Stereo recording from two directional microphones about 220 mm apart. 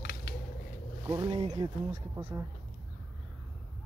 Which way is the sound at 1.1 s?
20° right (ahead or behind).